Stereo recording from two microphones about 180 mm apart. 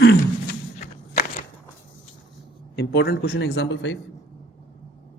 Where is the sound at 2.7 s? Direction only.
65° left (ahead or behind); by 4.0 s 90° left.